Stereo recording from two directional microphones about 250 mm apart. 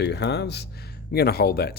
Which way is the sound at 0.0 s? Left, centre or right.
Left.